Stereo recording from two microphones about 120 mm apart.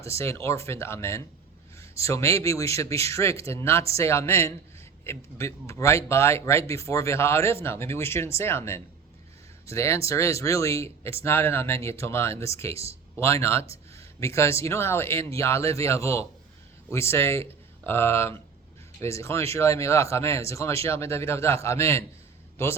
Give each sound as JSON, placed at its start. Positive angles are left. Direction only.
{"t": 0.0, "sound": "speech", "side_deg": 25}